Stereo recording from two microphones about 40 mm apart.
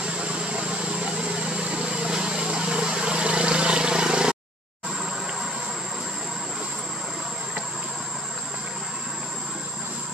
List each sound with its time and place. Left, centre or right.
0.0 s vehicle: right